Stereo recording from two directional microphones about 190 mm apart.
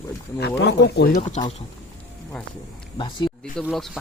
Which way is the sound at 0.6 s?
65° left (ahead or behind).